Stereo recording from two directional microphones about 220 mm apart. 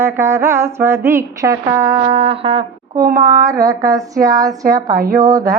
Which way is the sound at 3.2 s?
15° right (ahead or behind).